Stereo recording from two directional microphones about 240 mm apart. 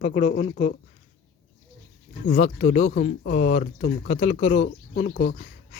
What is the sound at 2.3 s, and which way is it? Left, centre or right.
Speech, left.